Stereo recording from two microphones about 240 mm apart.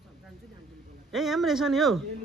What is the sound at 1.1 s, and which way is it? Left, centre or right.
Speech, centre.